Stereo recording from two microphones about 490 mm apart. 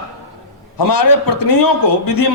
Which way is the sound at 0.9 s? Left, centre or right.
Left.